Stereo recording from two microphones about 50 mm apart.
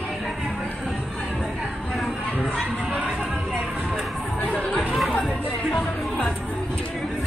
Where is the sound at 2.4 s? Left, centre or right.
Centre.